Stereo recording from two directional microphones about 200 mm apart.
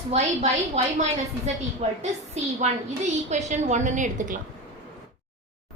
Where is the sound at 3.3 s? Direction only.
35° right (ahead or behind).